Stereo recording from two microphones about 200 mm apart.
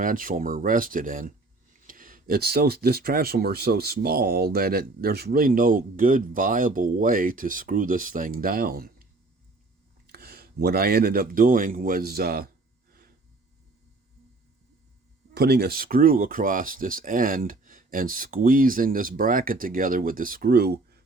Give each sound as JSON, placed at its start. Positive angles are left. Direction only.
{"t": 0.0, "sound": "speech", "side_deg": -45}
{"t": 10.1, "sound": "speech", "side_deg": -50}
{"t": 12.9, "sound": "snort", "side_deg": -45}
{"t": 15.4, "sound": "speech", "side_deg": -50}